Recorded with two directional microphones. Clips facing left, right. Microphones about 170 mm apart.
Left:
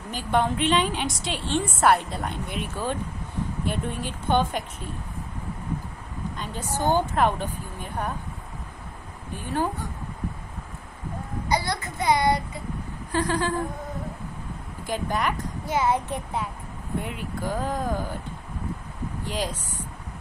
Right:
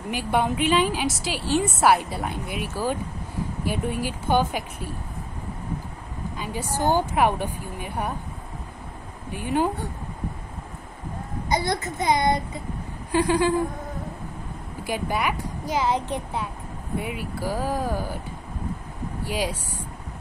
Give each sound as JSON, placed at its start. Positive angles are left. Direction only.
{"t": 0.1, "sound": "a woman's voice", "side_deg": -10}
{"t": 6.3, "sound": "speech", "side_deg": -10}
{"t": 9.3, "sound": "speech", "side_deg": -15}
{"t": 11.4, "sound": "a child's voice", "side_deg": -25}
{"t": 14.9, "sound": "speech", "side_deg": -10}
{"t": 17.0, "sound": "speech", "side_deg": -5}
{"t": 19.2, "sound": "speech", "side_deg": -10}